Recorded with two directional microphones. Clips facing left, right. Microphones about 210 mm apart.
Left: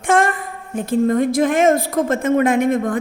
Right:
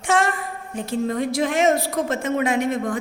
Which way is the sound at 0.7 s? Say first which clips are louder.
Left 7 dB; 50° left (ahead or behind).